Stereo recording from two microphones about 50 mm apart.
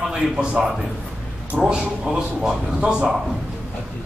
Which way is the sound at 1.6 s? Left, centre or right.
Centre.